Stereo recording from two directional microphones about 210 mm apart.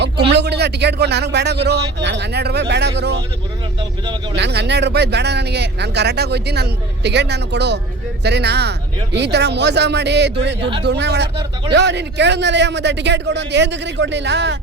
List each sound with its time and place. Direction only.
0.3 s speech: 55° right (ahead or behind)
4.0 s speech: 20° right (ahead or behind)
4.4 s a man's voice: 55° right (ahead or behind)